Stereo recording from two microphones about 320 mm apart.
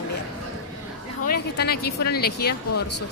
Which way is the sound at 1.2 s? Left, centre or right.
Left.